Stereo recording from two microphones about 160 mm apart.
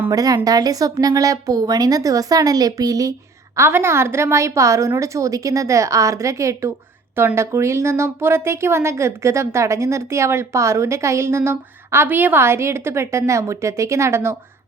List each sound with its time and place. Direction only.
0.1 s a woman's voice: 20° right (ahead or behind)